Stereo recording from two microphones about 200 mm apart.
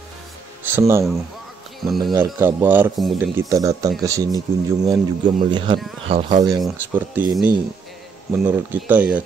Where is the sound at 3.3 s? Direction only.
15° right (ahead or behind).